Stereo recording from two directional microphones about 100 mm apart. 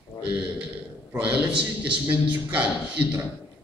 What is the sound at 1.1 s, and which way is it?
A man's voice, 15° right (ahead or behind).